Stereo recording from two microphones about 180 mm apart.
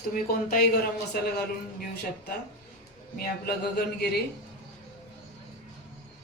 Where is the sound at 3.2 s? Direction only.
60° left (ahead or behind).